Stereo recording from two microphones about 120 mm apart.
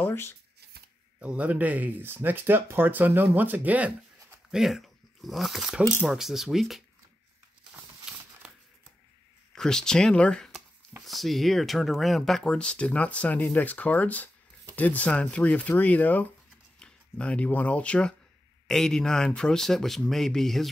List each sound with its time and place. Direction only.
0.0 s speech: 20° left (ahead or behind)
1.2 s speech: 10° right (ahead or behind)
9.5 s speech: 5° left (ahead or behind)